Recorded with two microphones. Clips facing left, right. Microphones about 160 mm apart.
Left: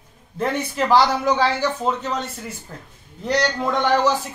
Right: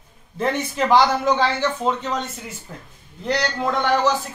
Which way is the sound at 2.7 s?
5° right (ahead or behind).